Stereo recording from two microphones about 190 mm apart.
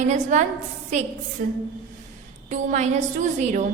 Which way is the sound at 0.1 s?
40° right (ahead or behind).